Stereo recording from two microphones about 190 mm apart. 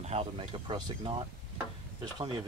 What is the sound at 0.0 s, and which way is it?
Speech, 35° right (ahead or behind).